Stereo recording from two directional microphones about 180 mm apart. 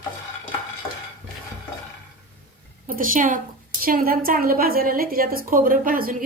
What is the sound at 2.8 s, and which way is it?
A woman's voice, 50° right (ahead or behind).